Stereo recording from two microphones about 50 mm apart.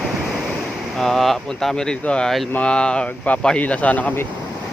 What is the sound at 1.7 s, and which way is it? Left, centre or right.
Speech, centre.